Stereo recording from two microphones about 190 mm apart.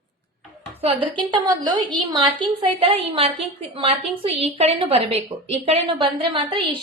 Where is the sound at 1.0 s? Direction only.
25° right (ahead or behind).